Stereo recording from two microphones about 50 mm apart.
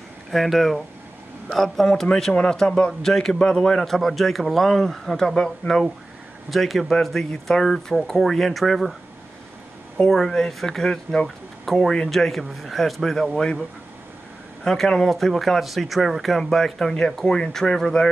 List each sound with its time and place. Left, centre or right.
0.3 s speech: centre
2.5 s speech: centre
10.0 s speech: centre
14.6 s speech: centre